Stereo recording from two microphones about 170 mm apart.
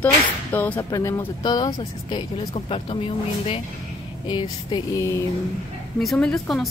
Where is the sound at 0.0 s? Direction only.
10° left (ahead or behind); by 3.0 s 30° left (ahead or behind).